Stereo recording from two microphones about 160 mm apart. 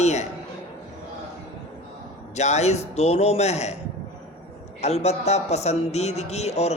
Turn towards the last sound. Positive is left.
turn(degrees=40)  # may be behind; listen again after turning